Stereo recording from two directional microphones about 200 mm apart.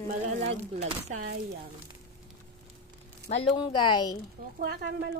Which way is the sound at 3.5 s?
25° left (ahead or behind).